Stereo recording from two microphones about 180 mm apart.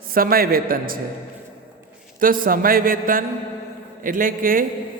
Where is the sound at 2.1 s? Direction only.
50° right (ahead or behind).